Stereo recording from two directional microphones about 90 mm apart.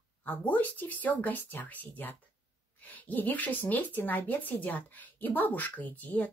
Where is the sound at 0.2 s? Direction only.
20° left (ahead or behind).